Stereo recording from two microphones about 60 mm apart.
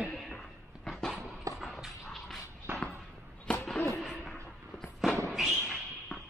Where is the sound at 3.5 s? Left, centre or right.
Centre.